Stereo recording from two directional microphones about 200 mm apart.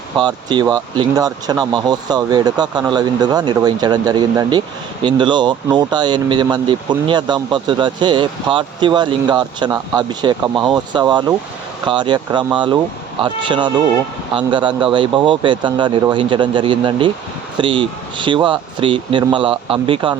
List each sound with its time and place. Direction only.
0.2 s speech: 20° right (ahead or behind)